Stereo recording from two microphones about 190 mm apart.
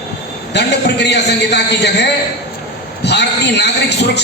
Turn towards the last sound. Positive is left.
turn(degrees=65)  # may be behind; listen again after turning